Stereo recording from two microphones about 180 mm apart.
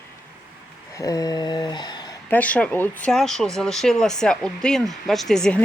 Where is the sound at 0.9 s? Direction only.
20° left (ahead or behind).